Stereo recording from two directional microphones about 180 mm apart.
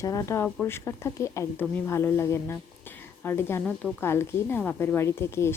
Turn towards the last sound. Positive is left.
turn(degrees=15)  # may be behind; listen again after turning